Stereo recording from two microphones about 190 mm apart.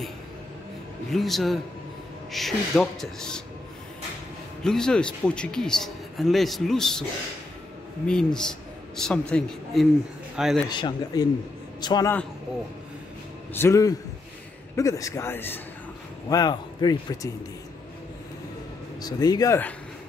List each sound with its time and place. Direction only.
1.1 s a man's voice: centre (ahead or behind)
4.6 s a man's voice: 5° left (ahead or behind)
8.1 s a man's voice: 5° left (ahead or behind)
10.7 s a man's voice: 25° left (ahead or behind)
13.5 s a man's voice: 15° left (ahead or behind)
18.9 s a man's voice: 20° left (ahead or behind)